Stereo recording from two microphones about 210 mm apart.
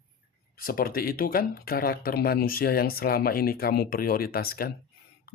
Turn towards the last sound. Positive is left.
turn(degrees=45)  # may be behind; listen again after turning